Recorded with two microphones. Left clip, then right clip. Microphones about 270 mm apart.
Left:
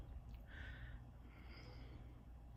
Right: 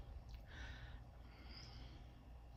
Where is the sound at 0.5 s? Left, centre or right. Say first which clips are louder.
Even; centre.